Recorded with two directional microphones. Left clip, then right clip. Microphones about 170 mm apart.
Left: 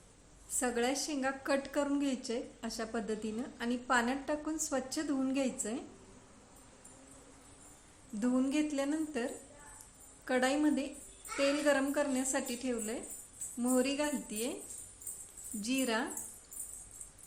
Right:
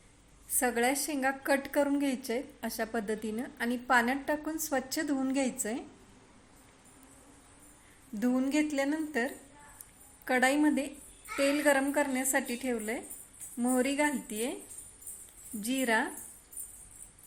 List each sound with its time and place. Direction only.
0.6 s a woman's voice: 25° right (ahead or behind)
8.2 s a woman's voice: 20° right (ahead or behind)
15.6 s a woman's voice: 20° right (ahead or behind)